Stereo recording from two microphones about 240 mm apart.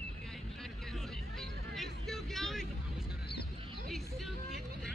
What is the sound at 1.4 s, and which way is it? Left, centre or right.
Music, centre.